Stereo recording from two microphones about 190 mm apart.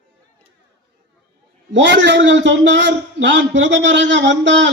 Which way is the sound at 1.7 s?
70° right (ahead or behind).